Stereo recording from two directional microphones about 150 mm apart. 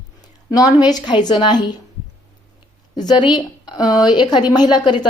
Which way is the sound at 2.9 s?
30° left (ahead or behind).